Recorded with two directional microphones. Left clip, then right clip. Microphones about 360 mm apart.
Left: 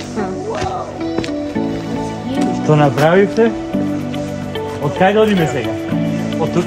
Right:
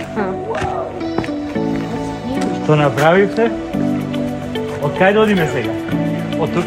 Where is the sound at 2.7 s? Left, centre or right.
Left.